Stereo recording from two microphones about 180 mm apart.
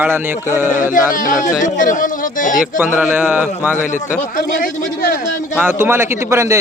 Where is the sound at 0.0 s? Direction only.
10° right (ahead or behind).